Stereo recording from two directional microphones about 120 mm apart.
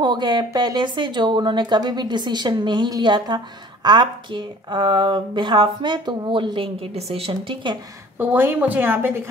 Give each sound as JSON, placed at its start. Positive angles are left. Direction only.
{"t": 0.0, "sound": "a woman's voice", "side_deg": -40}
{"t": 8.2, "sound": "a woman's voice", "side_deg": -15}